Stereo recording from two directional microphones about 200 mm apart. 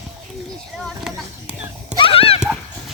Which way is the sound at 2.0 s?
30° left (ahead or behind).